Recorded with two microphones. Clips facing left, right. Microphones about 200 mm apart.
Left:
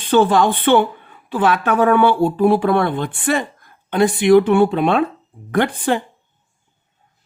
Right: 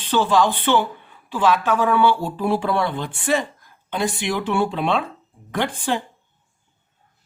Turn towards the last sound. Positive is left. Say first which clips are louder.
# left 6 dB
turn(degrees=55)  # may be behind; listen again after turning